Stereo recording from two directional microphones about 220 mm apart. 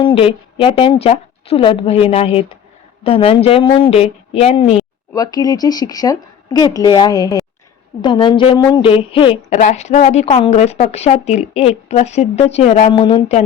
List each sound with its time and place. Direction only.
0.0 s a woman's voice: 25° left (ahead or behind)
5.1 s a woman's voice: 15° left (ahead or behind)